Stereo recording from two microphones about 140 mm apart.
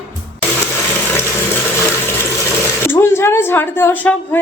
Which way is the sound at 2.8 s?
15° left (ahead or behind).